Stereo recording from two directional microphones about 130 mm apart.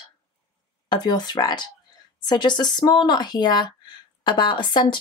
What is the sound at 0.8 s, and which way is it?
Speech, 35° left (ahead or behind).